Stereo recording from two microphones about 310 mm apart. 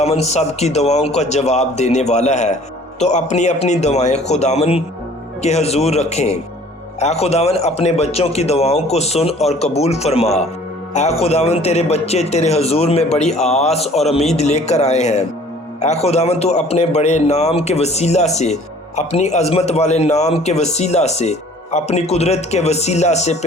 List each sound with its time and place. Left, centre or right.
0.0 s a man's voice: left